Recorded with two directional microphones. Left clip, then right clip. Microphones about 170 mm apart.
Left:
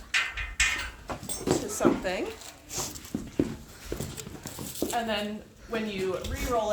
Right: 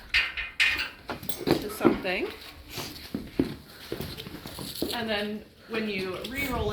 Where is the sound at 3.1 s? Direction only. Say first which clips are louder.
Even; 80° right.